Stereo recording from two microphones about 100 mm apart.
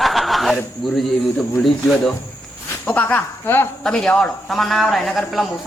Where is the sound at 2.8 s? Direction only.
15° left (ahead or behind).